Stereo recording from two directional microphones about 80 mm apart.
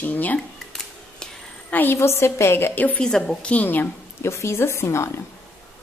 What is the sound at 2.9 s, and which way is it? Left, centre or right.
Speech, centre.